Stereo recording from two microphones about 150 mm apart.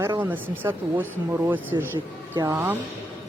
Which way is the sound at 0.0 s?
15° right (ahead or behind).